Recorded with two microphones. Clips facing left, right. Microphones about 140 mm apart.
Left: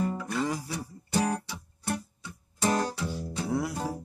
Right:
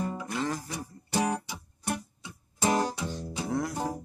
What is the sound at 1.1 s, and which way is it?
Guitar, 15° right (ahead or behind).